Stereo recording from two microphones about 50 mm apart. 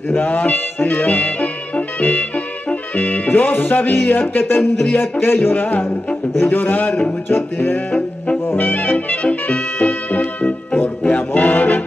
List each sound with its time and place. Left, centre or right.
0.1 s a man's voice: left
8.5 s music: left
11.1 s brass instrument: left